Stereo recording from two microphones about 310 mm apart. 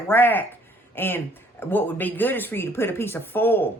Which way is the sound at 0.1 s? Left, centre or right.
Centre.